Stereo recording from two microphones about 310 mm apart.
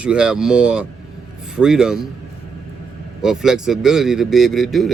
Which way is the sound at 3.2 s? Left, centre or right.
Centre.